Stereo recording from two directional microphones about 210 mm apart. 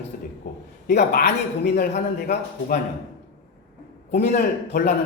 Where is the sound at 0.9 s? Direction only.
50° left (ahead or behind).